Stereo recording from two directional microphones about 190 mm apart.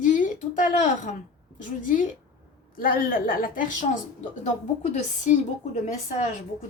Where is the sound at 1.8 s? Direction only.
45° left (ahead or behind).